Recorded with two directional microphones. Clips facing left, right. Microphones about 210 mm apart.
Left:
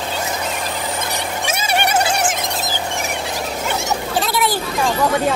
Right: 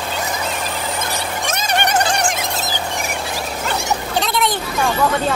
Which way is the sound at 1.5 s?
10° left (ahead or behind).